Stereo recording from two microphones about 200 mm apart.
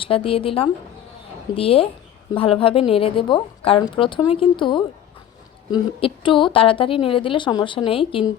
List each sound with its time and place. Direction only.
0.0 s a woman's voice: 25° left (ahead or behind)